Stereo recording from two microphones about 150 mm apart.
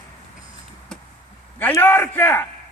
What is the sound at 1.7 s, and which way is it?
Speech, 15° left (ahead or behind).